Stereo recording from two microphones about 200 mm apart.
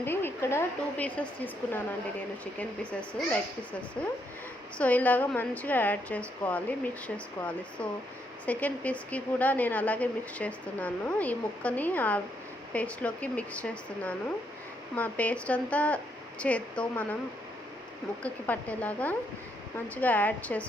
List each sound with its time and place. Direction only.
0.0 s a woman's voice: 10° left (ahead or behind)
2.4 s a woman's voice: 5° left (ahead or behind)
8.4 s a woman's voice: 5° left (ahead or behind)
18.2 s a woman's voice: 10° left (ahead or behind)